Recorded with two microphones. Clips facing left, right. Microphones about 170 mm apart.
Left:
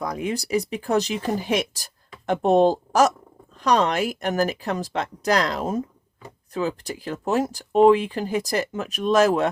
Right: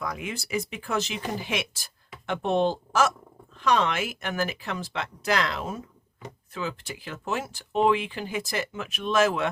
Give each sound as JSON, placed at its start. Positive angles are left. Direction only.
{"t": 0.0, "sound": "speech", "side_deg": 35}